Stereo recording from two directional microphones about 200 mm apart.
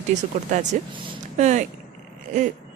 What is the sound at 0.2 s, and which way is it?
Speech, 35° right (ahead or behind).